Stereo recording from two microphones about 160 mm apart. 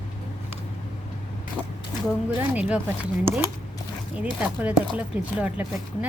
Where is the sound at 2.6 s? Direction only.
10° right (ahead or behind).